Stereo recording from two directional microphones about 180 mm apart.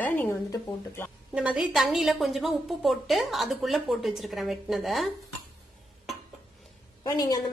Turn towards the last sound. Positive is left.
turn(degrees=20)  # may be behind; listen again after turning